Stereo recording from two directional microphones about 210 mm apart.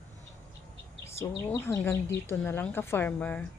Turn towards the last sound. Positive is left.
turn(degrees=5)  # may be behind; listen again after turning